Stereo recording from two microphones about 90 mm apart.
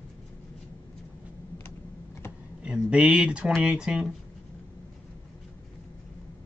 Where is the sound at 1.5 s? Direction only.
30° left (ahead or behind).